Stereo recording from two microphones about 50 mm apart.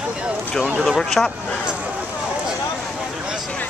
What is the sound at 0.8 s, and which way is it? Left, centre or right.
Speech, centre.